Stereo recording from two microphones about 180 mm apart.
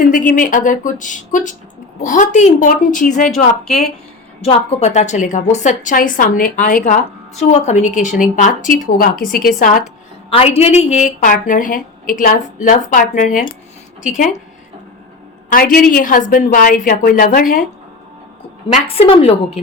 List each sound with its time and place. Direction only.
0.0 s a woman's voice: 45° left (ahead or behind)
4.4 s a woman's voice: 40° left (ahead or behind)
10.2 s a woman's voice: 35° left (ahead or behind)
15.4 s a woman's voice: 50° left (ahead or behind)
18.7 s a woman's voice: 30° left (ahead or behind)